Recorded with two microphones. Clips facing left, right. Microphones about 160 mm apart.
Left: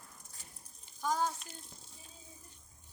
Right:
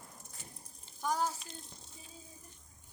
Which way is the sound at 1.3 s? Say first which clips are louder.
Right 1 dB; centre (ahead or behind).